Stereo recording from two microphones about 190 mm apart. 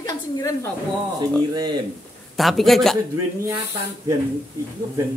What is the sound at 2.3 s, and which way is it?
Speech, centre (ahead or behind).